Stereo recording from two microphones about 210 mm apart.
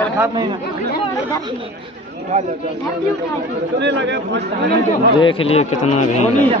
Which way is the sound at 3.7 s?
60° right (ahead or behind).